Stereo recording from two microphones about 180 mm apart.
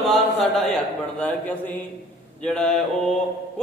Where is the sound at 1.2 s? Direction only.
5° left (ahead or behind).